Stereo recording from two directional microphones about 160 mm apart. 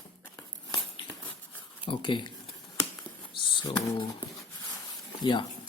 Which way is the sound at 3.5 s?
25° left (ahead or behind).